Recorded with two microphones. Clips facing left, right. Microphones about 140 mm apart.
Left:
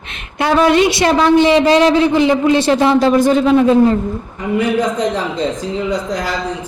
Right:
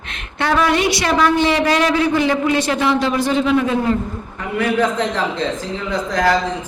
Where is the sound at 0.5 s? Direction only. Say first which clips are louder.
Left 5 dB; 25° left (ahead or behind); by 3.5 s 45° left (ahead or behind).